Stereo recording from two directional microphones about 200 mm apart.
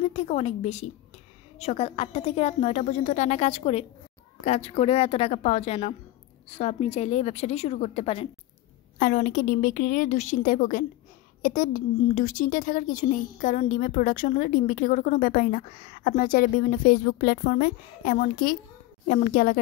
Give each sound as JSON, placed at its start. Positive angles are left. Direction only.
{"t": 0.1, "sound": "a woman's voice", "side_deg": 35}
{"t": 8.9, "sound": "a woman's voice", "side_deg": 40}